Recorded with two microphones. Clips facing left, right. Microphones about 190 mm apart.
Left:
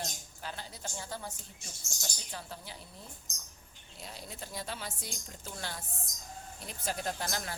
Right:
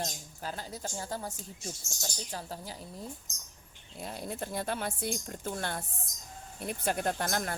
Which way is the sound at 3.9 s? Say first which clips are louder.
Right 8 dB; 50° right (ahead or behind).